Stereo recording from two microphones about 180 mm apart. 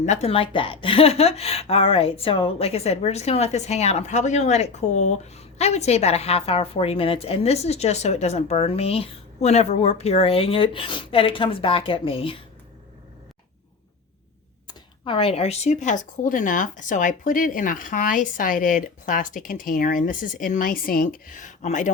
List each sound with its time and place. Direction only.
0.0 s a woman's voice: 40° left (ahead or behind)
14.7 s speech: 30° left (ahead or behind)